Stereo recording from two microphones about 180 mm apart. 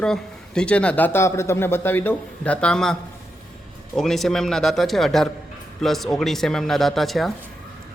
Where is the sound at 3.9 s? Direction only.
Centre (ahead or behind).